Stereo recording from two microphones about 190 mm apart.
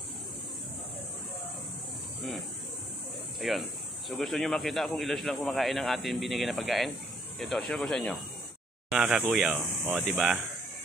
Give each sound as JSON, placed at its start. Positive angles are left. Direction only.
{"t": 3.3, "sound": "speech", "side_deg": 0}